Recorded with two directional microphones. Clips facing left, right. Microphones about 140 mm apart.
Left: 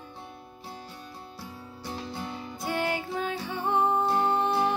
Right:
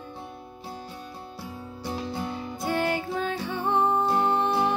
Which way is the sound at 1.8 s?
20° right (ahead or behind).